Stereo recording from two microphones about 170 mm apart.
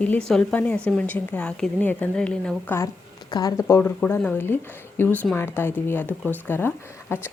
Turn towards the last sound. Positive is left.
turn(degrees=15)  # may be behind; listen again after turning